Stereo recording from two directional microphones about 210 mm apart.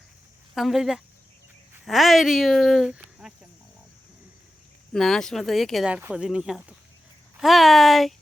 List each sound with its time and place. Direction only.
0.5 s speech: centre (ahead or behind)
4.9 s speech: centre (ahead or behind)